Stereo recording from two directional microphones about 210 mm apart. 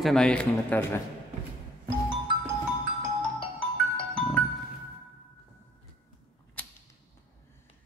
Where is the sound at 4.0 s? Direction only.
5° left (ahead or behind).